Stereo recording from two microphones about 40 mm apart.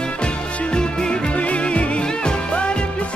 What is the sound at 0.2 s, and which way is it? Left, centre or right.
Music, left.